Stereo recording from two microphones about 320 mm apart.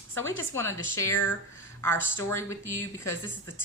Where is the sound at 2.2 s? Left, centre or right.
Centre.